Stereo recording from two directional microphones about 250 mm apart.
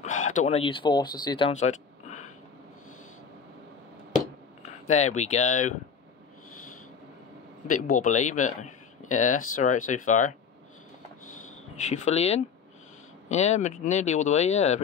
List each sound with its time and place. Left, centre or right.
0.0 s speech: left
4.8 s speech: left
7.8 s speech: left
11.9 s speech: left